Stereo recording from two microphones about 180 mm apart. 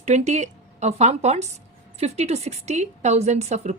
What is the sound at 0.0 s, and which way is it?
A woman's voice, 40° right (ahead or behind).